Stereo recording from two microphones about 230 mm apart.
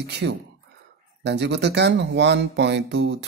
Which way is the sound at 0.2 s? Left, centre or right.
Right.